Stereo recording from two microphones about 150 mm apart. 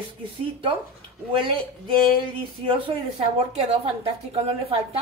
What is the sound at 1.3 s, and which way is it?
Speech, 35° right (ahead or behind).